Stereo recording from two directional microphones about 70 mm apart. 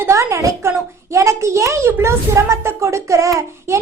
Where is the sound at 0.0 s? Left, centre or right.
Right.